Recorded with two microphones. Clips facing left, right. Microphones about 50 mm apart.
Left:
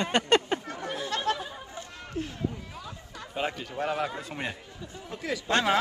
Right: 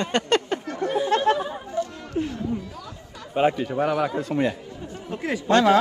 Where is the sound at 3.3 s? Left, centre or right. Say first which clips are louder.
Right 11 dB; right.